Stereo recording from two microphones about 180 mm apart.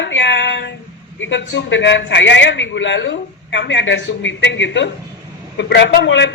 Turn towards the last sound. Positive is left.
turn(degrees=80)